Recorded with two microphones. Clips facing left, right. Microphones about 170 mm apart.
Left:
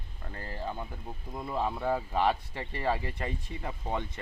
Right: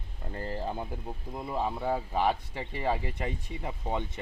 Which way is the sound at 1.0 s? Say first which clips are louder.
Right 1 dB; 15° right (ahead or behind).